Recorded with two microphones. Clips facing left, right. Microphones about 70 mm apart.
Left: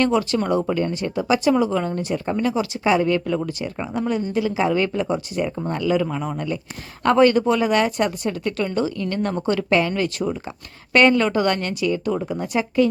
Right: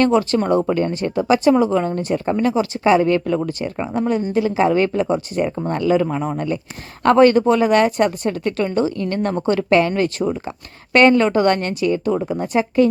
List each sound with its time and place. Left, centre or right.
0.0 s speech: right